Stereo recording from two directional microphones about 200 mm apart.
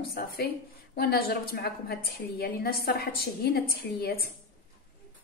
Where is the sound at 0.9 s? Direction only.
50° left (ahead or behind).